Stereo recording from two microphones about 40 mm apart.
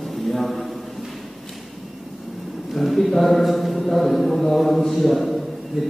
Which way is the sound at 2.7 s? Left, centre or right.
Centre.